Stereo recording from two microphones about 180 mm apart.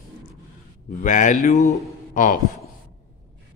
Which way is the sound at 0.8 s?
45° left (ahead or behind).